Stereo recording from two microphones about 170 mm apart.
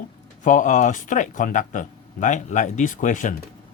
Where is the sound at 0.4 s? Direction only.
50° left (ahead or behind).